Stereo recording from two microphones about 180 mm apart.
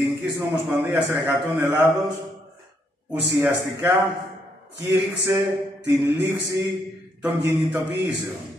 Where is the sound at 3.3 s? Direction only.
15° right (ahead or behind).